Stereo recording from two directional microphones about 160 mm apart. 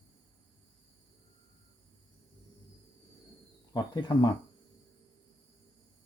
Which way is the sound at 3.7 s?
25° left (ahead or behind).